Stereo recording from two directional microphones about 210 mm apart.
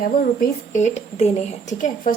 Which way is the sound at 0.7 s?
35° left (ahead or behind).